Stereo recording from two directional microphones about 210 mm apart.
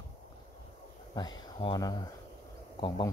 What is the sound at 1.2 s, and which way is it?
A man's voice, 20° left (ahead or behind).